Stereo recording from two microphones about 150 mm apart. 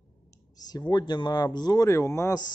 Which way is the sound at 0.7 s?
30° left (ahead or behind).